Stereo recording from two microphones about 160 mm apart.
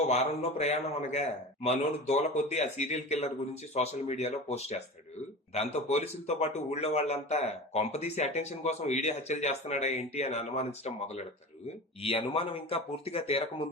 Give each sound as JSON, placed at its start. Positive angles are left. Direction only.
{"t": 0.1, "sound": "speech", "side_deg": 45}